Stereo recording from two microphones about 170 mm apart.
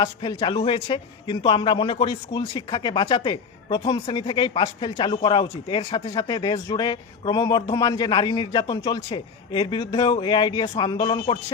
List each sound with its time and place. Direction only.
0.0 s a man's voice: 30° left (ahead or behind)